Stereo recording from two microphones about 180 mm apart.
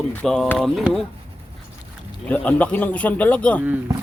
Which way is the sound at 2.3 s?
10° left (ahead or behind).